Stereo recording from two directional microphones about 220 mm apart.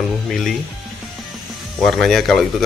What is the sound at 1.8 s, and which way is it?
Speech, centre (ahead or behind).